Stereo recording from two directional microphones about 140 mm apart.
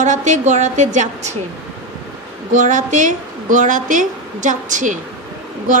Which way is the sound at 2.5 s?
65° right (ahead or behind).